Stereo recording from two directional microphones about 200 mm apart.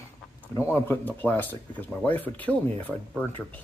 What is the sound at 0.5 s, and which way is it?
Speech, 10° left (ahead or behind).